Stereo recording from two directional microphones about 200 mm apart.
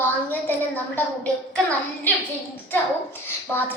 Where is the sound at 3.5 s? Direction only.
10° left (ahead or behind).